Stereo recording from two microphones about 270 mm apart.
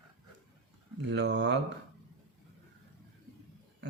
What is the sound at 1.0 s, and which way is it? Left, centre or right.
Speech, right.